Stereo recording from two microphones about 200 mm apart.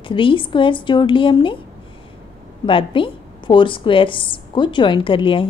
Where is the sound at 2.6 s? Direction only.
25° left (ahead or behind).